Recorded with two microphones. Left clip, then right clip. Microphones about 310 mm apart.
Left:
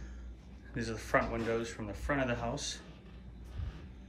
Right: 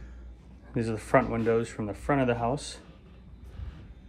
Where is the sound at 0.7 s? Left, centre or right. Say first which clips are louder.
Right 7 dB; centre.